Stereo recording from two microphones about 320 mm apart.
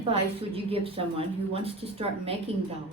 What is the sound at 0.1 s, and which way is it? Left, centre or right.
A woman's voice, centre.